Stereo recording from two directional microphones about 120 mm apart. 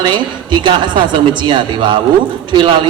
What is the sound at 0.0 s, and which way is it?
A man's voice, 40° right (ahead or behind).